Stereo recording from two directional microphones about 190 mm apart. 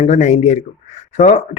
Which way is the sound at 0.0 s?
40° left (ahead or behind).